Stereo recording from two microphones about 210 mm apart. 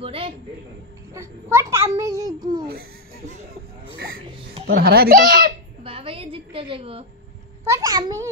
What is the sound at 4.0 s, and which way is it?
Music, 45° right (ahead or behind).